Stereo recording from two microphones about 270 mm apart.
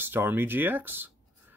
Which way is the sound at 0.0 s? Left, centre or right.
Centre.